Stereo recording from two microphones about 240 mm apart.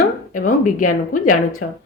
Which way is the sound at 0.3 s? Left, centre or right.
Left.